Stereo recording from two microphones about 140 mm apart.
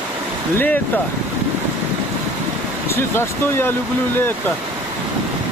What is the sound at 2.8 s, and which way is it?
Speech, 15° left (ahead or behind).